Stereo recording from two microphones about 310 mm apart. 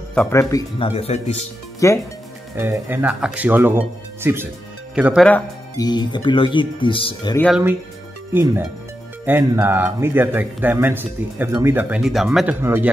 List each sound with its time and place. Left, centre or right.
0.1 s speech: centre
1.8 s speech: centre
2.5 s speech: centre
7.4 s speech: centre